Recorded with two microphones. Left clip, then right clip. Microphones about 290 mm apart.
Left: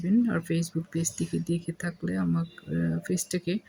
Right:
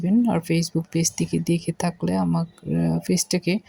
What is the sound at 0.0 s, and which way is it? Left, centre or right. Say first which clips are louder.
Speech: right 5 dB; centre.